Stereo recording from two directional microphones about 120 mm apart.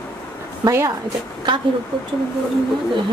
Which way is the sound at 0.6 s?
25° right (ahead or behind).